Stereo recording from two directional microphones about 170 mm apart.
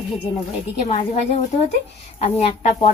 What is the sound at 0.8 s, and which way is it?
Speech, 40° left (ahead or behind).